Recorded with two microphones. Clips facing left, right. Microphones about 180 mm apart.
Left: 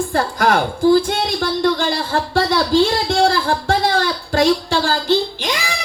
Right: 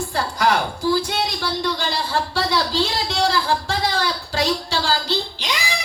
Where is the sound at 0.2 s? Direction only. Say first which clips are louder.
Left 3 dB; 50° left (ahead or behind).